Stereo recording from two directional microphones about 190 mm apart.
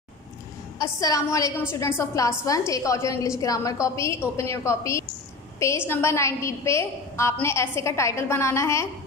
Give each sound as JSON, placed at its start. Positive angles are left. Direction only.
{"t": 0.7, "sound": "a woman's voice", "side_deg": 15}